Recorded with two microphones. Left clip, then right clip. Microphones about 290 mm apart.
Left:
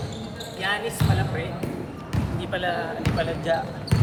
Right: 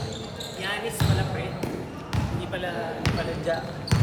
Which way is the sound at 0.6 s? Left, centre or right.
Centre.